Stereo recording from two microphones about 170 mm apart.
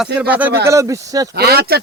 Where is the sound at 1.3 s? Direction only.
70° right (ahead or behind).